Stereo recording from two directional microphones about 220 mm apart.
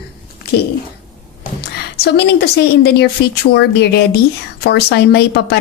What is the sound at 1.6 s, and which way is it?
A woman's voice, 50° left (ahead or behind).